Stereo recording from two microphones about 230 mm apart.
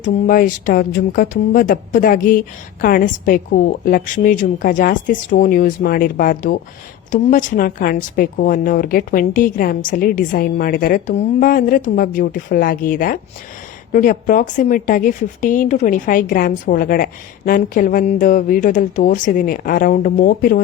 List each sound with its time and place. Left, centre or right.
0.0 s a woman's voice: left